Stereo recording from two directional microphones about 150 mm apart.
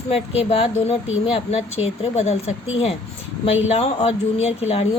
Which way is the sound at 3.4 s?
40° left (ahead or behind).